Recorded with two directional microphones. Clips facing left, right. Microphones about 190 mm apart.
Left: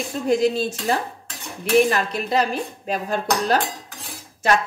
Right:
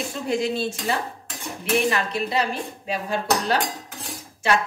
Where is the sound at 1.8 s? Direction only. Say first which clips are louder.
Left 1 dB; 45° left (ahead or behind).